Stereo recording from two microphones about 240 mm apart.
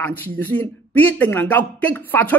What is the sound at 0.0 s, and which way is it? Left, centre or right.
Speech, centre.